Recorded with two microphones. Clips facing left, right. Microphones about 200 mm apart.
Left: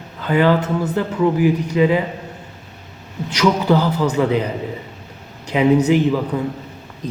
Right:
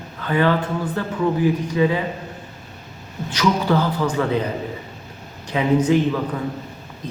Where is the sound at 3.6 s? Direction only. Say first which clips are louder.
Left 3 dB; 10° left (ahead or behind).